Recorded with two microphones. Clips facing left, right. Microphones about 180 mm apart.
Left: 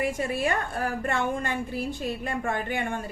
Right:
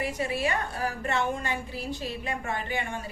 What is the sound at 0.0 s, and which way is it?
A woman's voice, 50° left (ahead or behind).